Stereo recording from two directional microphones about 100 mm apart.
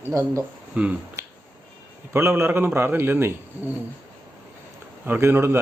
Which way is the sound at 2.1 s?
25° right (ahead or behind).